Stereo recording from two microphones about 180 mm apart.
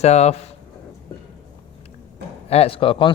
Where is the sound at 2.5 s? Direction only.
35° left (ahead or behind).